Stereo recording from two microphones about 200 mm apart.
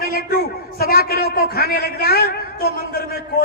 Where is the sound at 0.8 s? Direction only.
50° left (ahead or behind).